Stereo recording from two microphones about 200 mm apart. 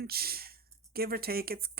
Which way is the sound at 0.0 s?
50° right (ahead or behind).